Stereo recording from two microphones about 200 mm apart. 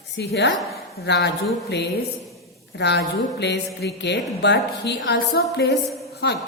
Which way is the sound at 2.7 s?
60° left (ahead or behind).